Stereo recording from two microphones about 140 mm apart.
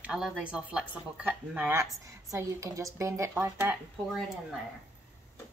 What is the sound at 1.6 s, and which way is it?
A woman's voice, 20° right (ahead or behind).